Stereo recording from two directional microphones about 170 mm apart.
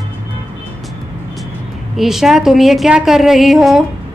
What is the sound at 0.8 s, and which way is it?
Vehicle, centre (ahead or behind).